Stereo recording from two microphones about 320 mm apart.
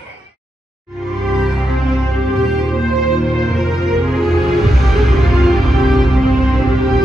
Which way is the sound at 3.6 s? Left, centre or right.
Centre.